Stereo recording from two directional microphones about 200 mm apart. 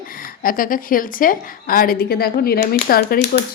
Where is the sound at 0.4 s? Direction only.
45° left (ahead or behind).